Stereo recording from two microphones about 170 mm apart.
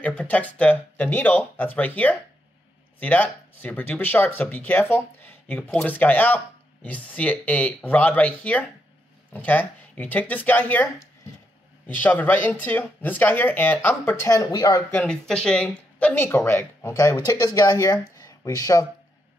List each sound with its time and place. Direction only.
0.0 s speech: 10° left (ahead or behind); by 14.8 s 25° left (ahead or behind)
14.9 s speech: 10° left (ahead or behind)